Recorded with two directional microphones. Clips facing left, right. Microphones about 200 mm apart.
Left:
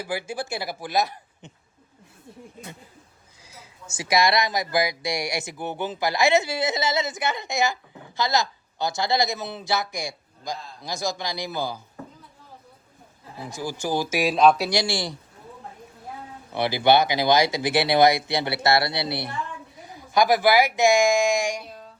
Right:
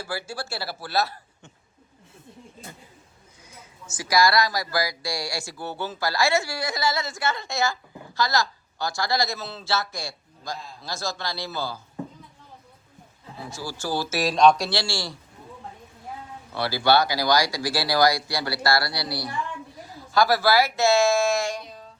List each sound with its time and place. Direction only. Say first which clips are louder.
0.0 s speech: left 3 dB; 15° left (ahead or behind)
3.6 s speech: left 1 dB; 30° left (ahead or behind)
13.4 s speech: left 3 dB; 15° left (ahead or behind)
16.5 s speech: left 2 dB; 20° left (ahead or behind)
21.6 s music: left 1 dB; 5° left (ahead or behind)